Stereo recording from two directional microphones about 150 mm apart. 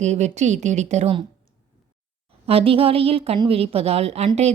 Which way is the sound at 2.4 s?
40° right (ahead or behind).